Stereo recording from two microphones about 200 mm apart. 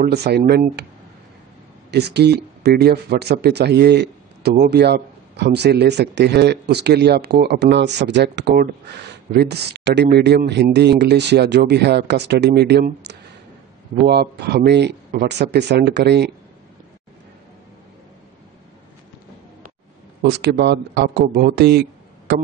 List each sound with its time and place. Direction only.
0.0 s speech: 55° right (ahead or behind)
1.9 s speech: 55° right (ahead or behind)
20.2 s speech: 55° right (ahead or behind)